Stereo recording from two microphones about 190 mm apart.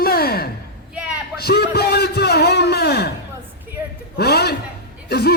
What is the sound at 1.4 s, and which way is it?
A man's voice, 55° left (ahead or behind).